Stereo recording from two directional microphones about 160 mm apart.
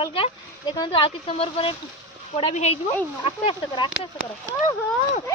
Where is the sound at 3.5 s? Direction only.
30° left (ahead or behind).